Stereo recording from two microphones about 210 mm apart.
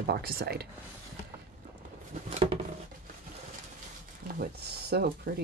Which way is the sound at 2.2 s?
30° right (ahead or behind).